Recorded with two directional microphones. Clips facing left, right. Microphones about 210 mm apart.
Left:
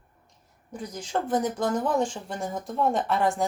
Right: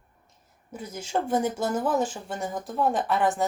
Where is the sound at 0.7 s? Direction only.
5° right (ahead or behind).